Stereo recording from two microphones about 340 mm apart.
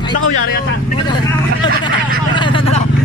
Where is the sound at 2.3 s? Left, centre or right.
Centre.